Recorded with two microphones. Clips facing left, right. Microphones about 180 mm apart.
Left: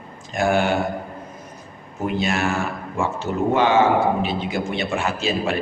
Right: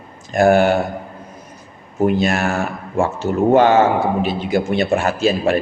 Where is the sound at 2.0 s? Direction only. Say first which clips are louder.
Right 4 dB; 45° right (ahead or behind).